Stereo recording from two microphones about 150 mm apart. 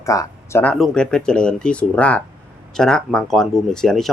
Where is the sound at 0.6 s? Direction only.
5° left (ahead or behind).